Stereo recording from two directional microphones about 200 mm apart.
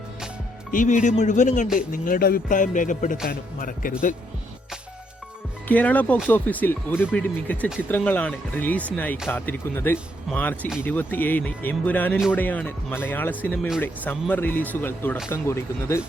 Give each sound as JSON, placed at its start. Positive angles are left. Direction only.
{"t": 0.7, "sound": "a man's voice", "side_deg": 40}
{"t": 5.6, "sound": "speech", "side_deg": 10}